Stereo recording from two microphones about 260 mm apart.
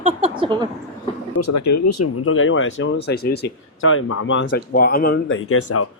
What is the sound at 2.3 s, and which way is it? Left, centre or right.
Speech, left.